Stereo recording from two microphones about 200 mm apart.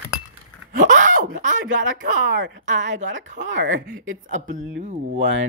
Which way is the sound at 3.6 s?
40° right (ahead or behind).